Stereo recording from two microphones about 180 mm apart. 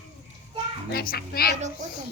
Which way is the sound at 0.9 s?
60° left (ahead or behind).